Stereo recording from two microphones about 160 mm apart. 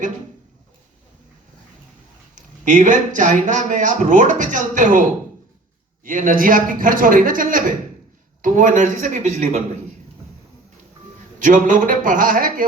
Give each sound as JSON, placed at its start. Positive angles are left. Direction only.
{"t": 2.3, "sound": "a man's voice", "side_deg": -50}
{"t": 11.4, "sound": "a man's voice", "side_deg": -55}